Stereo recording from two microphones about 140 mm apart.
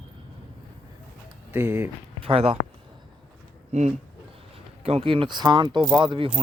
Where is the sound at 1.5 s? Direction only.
15° right (ahead or behind).